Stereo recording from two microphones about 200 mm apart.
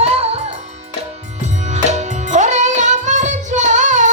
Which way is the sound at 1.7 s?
35° right (ahead or behind).